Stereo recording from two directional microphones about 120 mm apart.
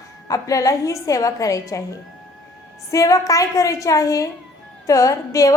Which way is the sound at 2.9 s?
25° left (ahead or behind).